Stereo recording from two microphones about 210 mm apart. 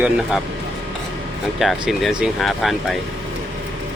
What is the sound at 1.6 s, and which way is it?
Speech, centre (ahead or behind).